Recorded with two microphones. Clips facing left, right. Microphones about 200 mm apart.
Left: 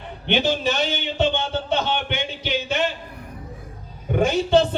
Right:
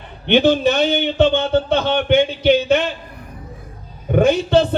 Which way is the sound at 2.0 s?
55° right (ahead or behind).